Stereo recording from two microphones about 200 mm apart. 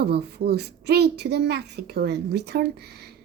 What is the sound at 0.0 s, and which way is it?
A woman's voice, 55° right (ahead or behind).